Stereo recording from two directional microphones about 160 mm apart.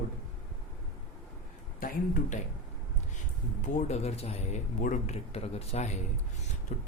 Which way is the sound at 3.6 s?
45° left (ahead or behind).